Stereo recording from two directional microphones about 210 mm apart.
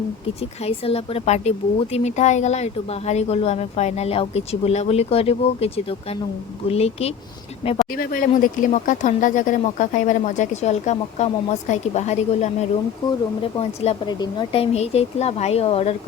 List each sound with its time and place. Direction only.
0.6 s a woman's voice: 30° left (ahead or behind)
7.9 s a woman's voice: 40° left (ahead or behind)